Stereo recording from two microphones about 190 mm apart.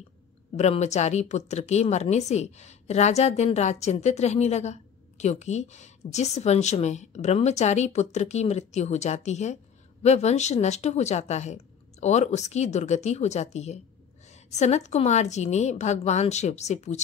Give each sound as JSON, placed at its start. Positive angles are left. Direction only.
{"t": 0.6, "sound": "a woman's voice", "side_deg": 35}